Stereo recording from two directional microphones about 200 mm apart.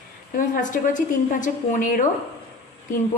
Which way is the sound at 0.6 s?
40° left (ahead or behind).